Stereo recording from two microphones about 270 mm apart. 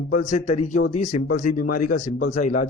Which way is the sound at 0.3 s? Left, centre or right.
Left.